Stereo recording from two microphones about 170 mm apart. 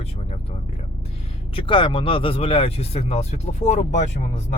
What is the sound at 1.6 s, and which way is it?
Speech, 30° left (ahead or behind).